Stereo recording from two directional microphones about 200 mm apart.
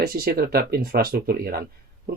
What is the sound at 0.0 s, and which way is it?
Speech, 50° right (ahead or behind).